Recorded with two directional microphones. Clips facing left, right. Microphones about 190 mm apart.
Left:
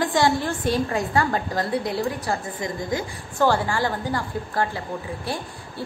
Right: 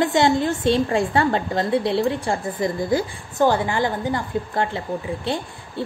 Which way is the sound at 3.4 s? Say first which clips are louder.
Right 2 dB; 20° right (ahead or behind).